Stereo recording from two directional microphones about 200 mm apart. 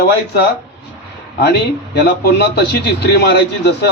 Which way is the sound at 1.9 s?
55° left (ahead or behind).